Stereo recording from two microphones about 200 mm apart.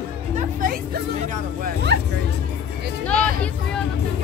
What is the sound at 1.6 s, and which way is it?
Speech, 55° right (ahead or behind).